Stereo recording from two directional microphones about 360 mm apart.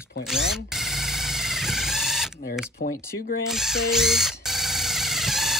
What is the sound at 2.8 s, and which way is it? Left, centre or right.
Speech, left.